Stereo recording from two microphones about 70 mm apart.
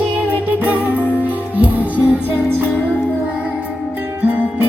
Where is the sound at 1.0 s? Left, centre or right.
Left.